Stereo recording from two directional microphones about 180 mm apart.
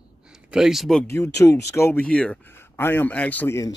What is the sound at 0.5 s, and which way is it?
Speech, 5° right (ahead or behind).